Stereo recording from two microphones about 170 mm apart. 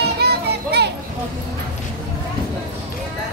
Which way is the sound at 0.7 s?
70° right (ahead or behind).